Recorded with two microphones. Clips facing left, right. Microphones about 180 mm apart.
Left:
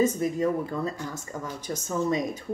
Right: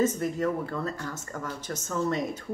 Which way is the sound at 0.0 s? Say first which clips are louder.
Left 2 dB; 15° left (ahead or behind).